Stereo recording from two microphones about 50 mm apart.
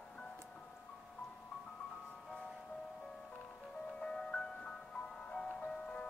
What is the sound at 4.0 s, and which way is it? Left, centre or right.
Music, centre.